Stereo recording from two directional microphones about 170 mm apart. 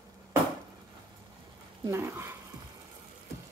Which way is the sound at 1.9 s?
15° right (ahead or behind).